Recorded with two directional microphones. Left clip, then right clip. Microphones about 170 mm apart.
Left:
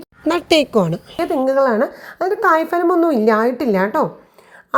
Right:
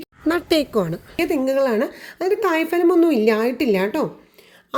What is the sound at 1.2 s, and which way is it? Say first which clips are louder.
A woman's voice: left 4 dB; 30° right (ahead or behind).